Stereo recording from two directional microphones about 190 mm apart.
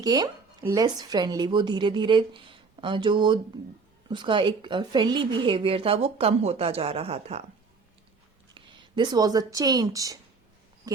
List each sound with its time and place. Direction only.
0.0 s speech: 20° right (ahead or behind)
8.5 s speech: 25° right (ahead or behind)